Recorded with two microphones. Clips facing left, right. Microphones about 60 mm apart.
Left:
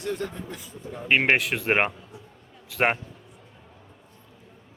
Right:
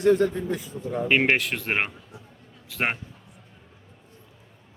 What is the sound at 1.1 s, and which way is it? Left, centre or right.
A man's voice, centre.